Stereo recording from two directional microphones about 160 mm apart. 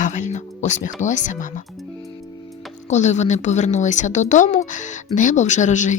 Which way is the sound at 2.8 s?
45° left (ahead or behind).